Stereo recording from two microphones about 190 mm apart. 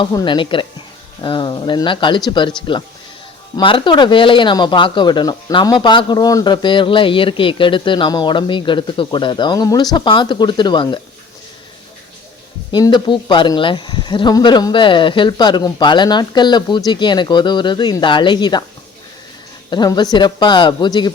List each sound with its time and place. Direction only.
0.0 s speech: 20° left (ahead or behind)
3.6 s speech: 25° left (ahead or behind)
12.7 s speech: 25° left (ahead or behind)
19.7 s speech: 20° left (ahead or behind)